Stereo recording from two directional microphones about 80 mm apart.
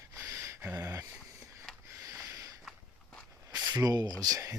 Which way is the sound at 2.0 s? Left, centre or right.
Right.